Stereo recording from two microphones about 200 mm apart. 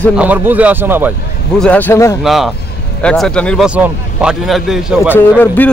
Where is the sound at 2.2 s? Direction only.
Centre (ahead or behind).